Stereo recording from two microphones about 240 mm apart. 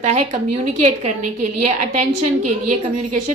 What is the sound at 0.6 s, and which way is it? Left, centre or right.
A woman's voice, right.